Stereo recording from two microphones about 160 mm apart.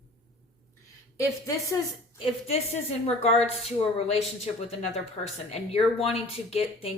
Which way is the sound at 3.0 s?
40° left (ahead or behind).